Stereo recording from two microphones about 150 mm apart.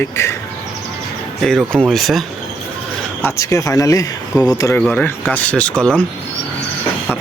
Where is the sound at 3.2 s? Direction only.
15° left (ahead or behind).